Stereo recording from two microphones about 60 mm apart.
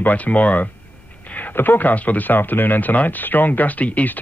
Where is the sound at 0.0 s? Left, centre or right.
Left.